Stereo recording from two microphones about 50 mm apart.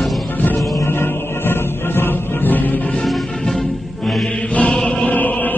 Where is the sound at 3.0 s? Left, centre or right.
Centre.